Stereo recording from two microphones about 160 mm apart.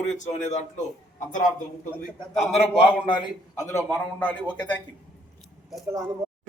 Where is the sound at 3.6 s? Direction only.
20° left (ahead or behind).